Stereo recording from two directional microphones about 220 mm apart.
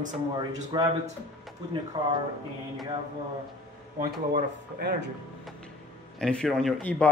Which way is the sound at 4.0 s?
40° right (ahead or behind).